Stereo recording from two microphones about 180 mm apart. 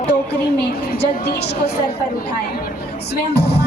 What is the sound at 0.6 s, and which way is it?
A woman's voice, 65° left (ahead or behind).